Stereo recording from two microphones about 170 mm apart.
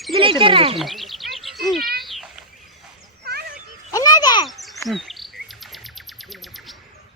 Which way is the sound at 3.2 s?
65° right (ahead or behind).